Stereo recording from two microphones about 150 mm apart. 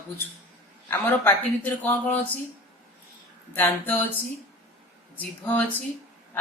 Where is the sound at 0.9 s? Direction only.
15° left (ahead or behind).